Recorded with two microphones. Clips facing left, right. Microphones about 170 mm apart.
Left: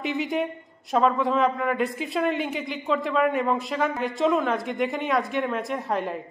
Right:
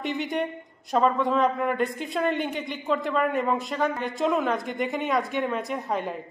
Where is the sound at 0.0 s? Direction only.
Centre (ahead or behind).